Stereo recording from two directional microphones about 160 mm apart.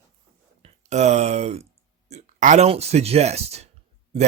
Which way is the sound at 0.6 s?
45° right (ahead or behind).